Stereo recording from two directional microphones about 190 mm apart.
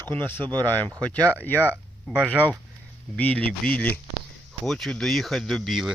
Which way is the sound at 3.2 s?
5° left (ahead or behind).